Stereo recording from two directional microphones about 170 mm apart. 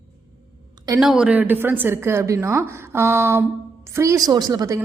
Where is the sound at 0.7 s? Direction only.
20° right (ahead or behind).